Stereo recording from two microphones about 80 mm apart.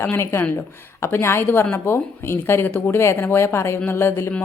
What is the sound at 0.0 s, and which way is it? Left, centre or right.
A woman's voice, left.